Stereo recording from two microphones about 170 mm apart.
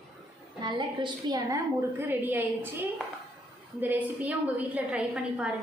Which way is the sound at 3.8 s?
10° right (ahead or behind).